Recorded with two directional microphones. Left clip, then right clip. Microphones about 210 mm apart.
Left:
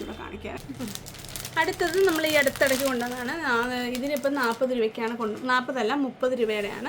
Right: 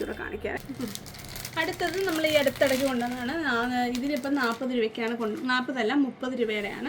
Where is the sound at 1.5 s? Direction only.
35° left (ahead or behind).